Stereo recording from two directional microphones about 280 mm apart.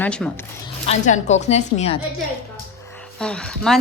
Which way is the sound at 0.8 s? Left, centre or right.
Left.